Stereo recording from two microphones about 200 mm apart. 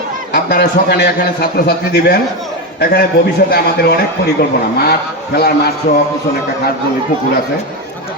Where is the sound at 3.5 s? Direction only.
50° left (ahead or behind).